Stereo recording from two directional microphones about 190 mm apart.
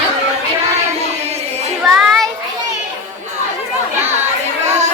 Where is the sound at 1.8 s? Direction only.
Centre (ahead or behind).